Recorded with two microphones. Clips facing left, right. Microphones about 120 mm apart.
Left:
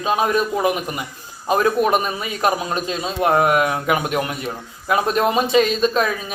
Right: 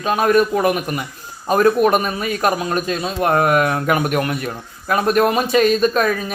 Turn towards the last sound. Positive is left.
turn(degrees=20)  # may be behind; listen again after turning